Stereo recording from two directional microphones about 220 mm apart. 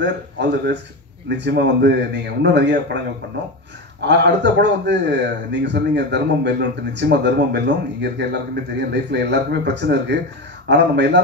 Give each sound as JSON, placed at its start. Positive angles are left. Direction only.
{"t": 0.0, "sound": "a man's voice", "side_deg": -50}
{"t": 4.0, "sound": "a man's voice", "side_deg": -50}